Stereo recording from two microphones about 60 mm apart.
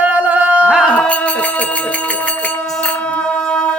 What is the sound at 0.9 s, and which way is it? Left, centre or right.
Music, left.